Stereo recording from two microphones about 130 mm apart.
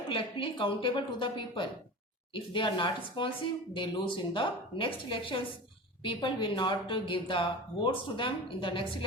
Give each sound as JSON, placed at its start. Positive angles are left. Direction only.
{"t": 0.1, "sound": "a woman's voice", "side_deg": 40}